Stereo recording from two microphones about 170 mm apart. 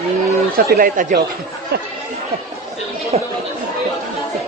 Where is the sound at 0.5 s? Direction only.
65° right (ahead or behind).